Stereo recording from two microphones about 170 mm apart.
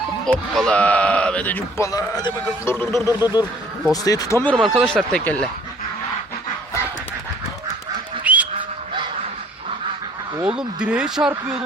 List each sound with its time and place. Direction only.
0.3 s speech: 5° left (ahead or behind)
4.5 s speech: centre (ahead or behind)
8.2 s bird: 10° right (ahead or behind)
10.4 s speech: 5° right (ahead or behind)